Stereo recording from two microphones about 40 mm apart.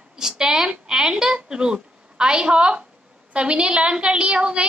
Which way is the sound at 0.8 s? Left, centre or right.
Centre.